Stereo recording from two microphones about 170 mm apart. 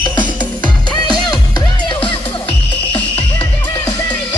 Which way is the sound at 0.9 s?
25° left (ahead or behind).